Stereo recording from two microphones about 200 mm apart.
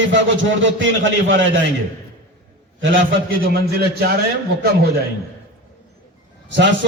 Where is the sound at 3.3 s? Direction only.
50° right (ahead or behind).